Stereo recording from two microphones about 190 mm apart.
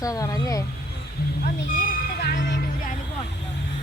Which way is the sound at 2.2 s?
60° left (ahead or behind).